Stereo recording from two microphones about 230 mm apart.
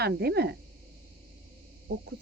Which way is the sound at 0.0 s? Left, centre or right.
Right.